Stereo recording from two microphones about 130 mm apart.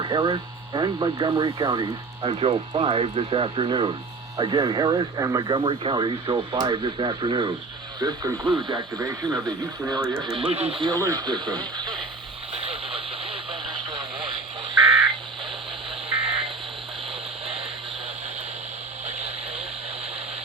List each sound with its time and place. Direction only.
0.0 s speech: 35° right (ahead or behind)
10.3 s speech: 45° right (ahead or behind)
10.9 s speech: 25° right (ahead or behind)
12.5 s vehicle: 50° right (ahead or behind)
16.0 s a sound: 45° right (ahead or behind)
19.0 s vehicle: 50° right (ahead or behind)